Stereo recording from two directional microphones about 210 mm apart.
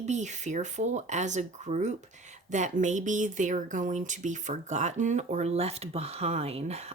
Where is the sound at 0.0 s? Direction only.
35° right (ahead or behind).